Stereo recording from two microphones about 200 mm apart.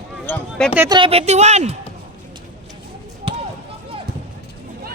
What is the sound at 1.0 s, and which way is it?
Speech, 30° right (ahead or behind).